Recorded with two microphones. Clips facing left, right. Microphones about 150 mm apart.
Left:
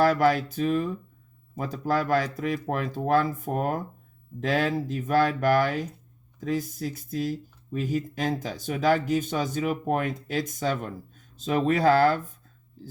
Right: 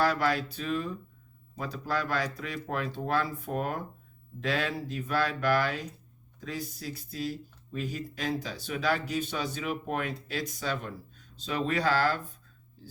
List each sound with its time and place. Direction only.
0.0 s speech: 50° left (ahead or behind)